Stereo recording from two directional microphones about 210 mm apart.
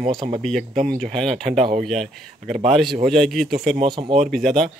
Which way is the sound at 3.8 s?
25° right (ahead or behind).